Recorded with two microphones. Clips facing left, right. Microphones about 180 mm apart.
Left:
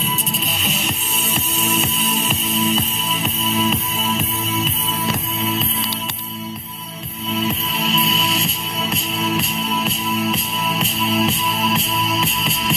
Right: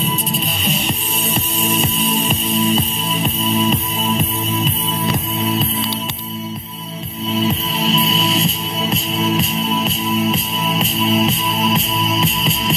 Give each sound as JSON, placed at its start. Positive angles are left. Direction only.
{"t": 1.6, "sound": "music", "side_deg": -35}
{"t": 7.3, "sound": "music", "side_deg": -25}